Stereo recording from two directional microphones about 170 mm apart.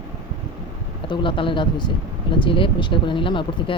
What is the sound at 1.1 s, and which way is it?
Speech, 30° left (ahead or behind).